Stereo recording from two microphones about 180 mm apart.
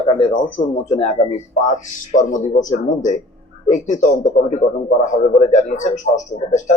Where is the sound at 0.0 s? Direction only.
30° left (ahead or behind).